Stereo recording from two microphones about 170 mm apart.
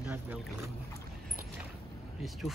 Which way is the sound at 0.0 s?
10° right (ahead or behind).